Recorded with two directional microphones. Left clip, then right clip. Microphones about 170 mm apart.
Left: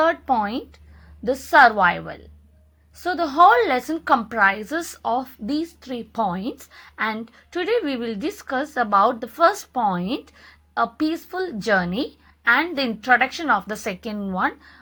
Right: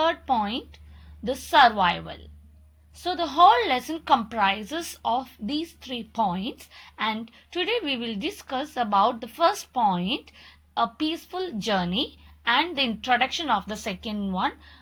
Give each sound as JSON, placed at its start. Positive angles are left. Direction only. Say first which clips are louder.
{"t": 0.0, "sound": "a woman's voice", "louder": "left 4 dB", "side_deg": 20}